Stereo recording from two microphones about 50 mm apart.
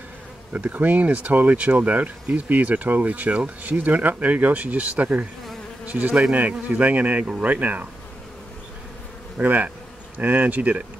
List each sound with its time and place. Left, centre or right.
0.5 s speech: right
9.4 s speech: right